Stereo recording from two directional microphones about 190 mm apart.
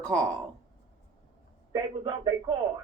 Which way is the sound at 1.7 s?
20° right (ahead or behind).